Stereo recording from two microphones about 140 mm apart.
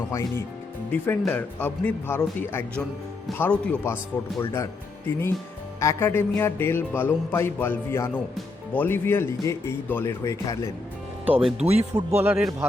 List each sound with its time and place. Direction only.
0.1 s speech: 20° left (ahead or behind)
11.6 s speech: 50° right (ahead or behind)
11.9 s speech: 15° right (ahead or behind)